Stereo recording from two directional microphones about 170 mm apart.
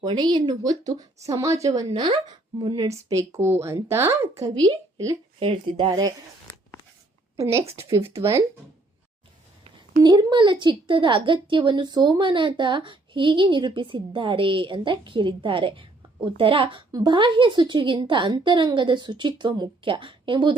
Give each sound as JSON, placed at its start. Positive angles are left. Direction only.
{"t": 0.0, "sound": "a woman's voice", "side_deg": -25}
{"t": 7.3, "sound": "a woman's voice", "side_deg": -15}
{"t": 10.0, "sound": "a woman's voice", "side_deg": -25}